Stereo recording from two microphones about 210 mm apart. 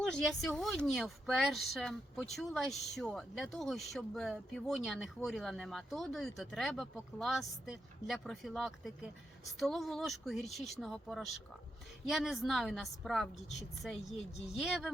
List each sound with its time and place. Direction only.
0.0 s speech: centre (ahead or behind)
14.4 s speech: centre (ahead or behind)